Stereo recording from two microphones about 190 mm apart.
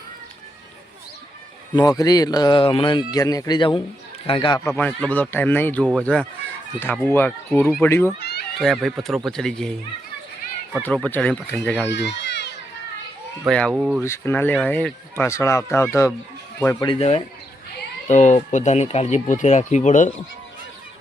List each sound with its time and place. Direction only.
1.7 s speech: 20° left (ahead or behind)
4.7 s speech: 5° left (ahead or behind)
8.2 s a sound: 60° left (ahead or behind)
8.5 s speech: centre (ahead or behind)
10.8 s speech: 5° left (ahead or behind)
11.9 s a sound: 65° left (ahead or behind)
13.5 s speech: 5° left (ahead or behind)
14.0 s speech: 15° left (ahead or behind)
16.8 s speech: 30° left (ahead or behind)